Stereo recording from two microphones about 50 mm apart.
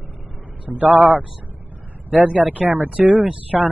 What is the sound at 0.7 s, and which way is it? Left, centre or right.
Speech, right.